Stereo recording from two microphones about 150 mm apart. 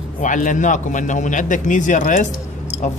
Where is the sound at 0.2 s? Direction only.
60° left (ahead or behind).